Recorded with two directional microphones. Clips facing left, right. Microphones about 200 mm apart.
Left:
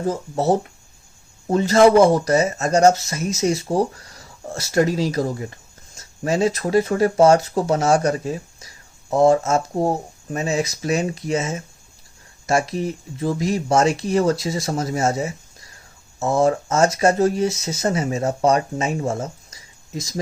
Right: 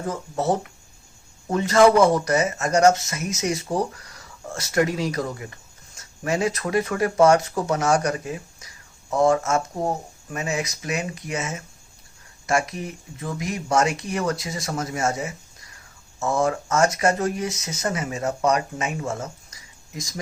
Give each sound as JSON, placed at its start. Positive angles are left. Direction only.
{"t": 0.0, "sound": "speech", "side_deg": 30}